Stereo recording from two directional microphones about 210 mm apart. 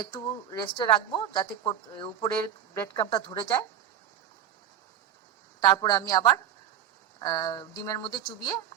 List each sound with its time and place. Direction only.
0.0 s speech: 20° left (ahead or behind)
5.5 s speech: 20° left (ahead or behind)